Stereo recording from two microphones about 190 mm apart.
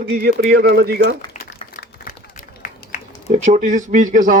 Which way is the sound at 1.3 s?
40° left (ahead or behind).